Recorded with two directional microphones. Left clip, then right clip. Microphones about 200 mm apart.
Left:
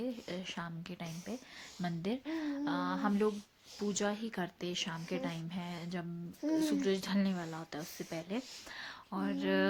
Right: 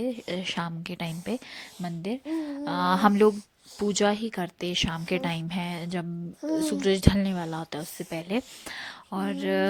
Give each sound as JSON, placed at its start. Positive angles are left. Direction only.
{"t": 0.0, "sound": "speech", "side_deg": -45}
{"t": 1.8, "sound": "speech", "side_deg": -25}
{"t": 2.6, "sound": "speech", "side_deg": -45}